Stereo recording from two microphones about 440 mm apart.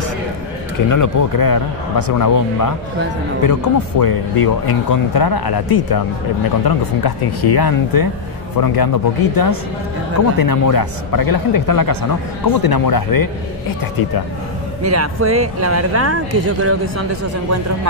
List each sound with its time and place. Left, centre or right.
0.7 s speech: left
14.8 s speech: right